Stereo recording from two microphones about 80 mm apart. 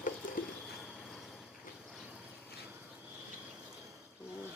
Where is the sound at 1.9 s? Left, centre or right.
Centre.